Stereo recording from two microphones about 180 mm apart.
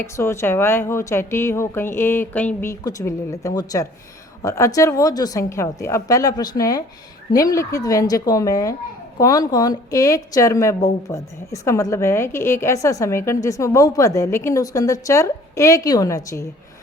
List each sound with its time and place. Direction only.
0.0 s a woman's voice: 15° left (ahead or behind)